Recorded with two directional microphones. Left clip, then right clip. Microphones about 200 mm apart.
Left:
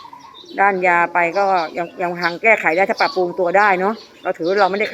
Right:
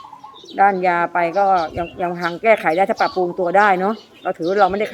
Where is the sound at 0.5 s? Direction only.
5° right (ahead or behind).